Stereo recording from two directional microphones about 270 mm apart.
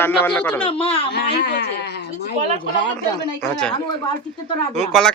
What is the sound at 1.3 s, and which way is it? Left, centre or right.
Speech, left.